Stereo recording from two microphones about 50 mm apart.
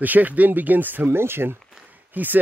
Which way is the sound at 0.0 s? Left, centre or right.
Right.